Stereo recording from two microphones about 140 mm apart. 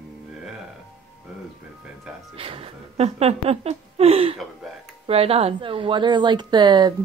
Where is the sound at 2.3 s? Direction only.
40° right (ahead or behind).